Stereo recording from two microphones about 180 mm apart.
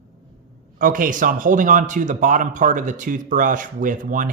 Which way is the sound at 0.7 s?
50° right (ahead or behind).